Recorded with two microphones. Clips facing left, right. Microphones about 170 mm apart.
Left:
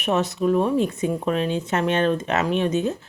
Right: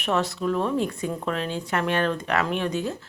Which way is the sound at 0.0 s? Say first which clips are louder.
Left 3 dB; 20° left (ahead or behind).